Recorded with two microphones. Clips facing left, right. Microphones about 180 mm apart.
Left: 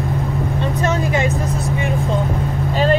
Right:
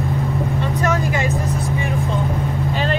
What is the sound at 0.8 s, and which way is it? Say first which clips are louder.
Vehicle: left 2 dB; 25° left (ahead or behind).